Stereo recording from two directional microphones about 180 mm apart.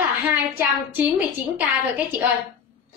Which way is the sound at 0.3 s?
10° right (ahead or behind).